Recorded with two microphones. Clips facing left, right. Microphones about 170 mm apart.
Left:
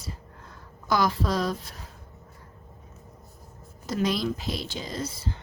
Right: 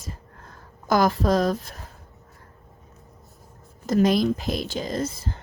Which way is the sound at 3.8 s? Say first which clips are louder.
Right 7 dB; 50° right (ahead or behind).